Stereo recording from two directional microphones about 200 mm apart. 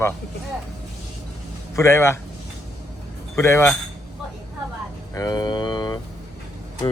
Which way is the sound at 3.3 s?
10° left (ahead or behind).